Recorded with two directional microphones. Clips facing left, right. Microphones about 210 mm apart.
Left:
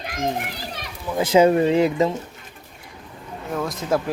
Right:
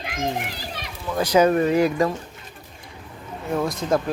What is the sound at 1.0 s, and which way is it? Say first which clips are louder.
Speech: left 2 dB; 20° left (ahead or behind).